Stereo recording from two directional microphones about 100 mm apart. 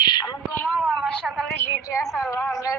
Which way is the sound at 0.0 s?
45° left (ahead or behind).